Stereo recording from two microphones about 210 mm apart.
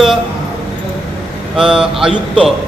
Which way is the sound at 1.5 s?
5° right (ahead or behind).